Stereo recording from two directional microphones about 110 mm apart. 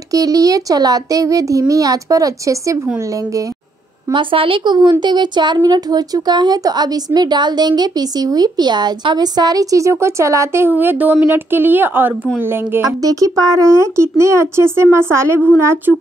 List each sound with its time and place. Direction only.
0.1 s a child's voice: 30° right (ahead or behind)
4.1 s a child's voice: 50° right (ahead or behind); by 12.1 s 20° right (ahead or behind)
12.8 s a woman's voice: 30° right (ahead or behind)